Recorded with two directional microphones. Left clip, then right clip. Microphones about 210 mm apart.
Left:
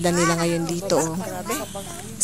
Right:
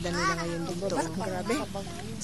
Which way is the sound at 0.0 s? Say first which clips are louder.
Left 8 dB; 35° left (ahead or behind).